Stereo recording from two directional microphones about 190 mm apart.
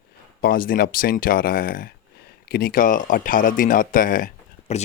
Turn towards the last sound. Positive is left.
turn(degrees=40)  # may be behind; listen again after turning